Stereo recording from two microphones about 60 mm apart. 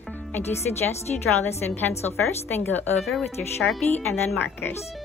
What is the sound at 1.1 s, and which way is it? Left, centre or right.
Speech, centre.